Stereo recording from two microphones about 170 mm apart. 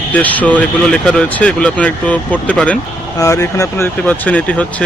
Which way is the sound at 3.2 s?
20° left (ahead or behind).